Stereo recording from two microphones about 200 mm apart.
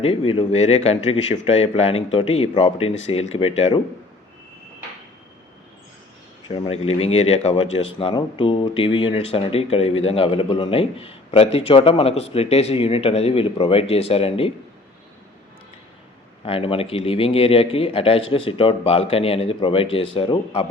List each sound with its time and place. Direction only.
0.0 s a man's voice: 30° left (ahead or behind)
6.5 s a man's voice: 30° left (ahead or behind)
16.4 s a man's voice: 30° left (ahead or behind)